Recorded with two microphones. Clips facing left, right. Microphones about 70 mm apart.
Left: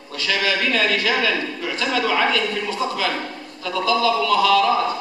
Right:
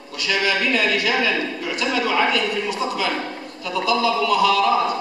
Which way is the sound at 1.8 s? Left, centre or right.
Centre.